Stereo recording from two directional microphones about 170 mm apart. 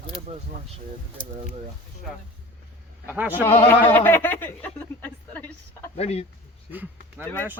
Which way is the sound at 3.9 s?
10° left (ahead or behind).